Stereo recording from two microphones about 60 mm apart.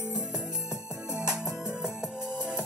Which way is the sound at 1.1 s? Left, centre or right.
Centre.